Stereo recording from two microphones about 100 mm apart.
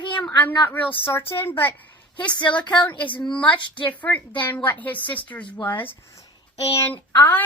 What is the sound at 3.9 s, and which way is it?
A woman's voice, 15° left (ahead or behind).